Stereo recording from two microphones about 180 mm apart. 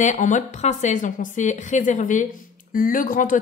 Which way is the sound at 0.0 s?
45° left (ahead or behind).